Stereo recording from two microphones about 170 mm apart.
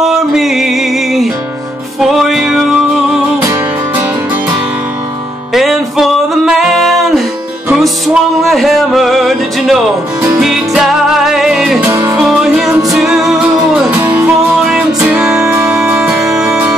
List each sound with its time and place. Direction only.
0.0 s music: centre (ahead or behind)
2.0 s music: centre (ahead or behind)
5.5 s music: centre (ahead or behind)
11.9 s music: 20° right (ahead or behind)
12.2 s music: centre (ahead or behind)